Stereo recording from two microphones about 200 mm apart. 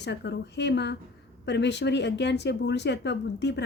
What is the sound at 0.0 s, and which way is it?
Speech, 60° left (ahead or behind).